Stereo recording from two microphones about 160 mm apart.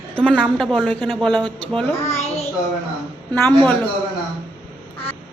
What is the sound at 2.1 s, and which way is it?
Child singing, 40° left (ahead or behind).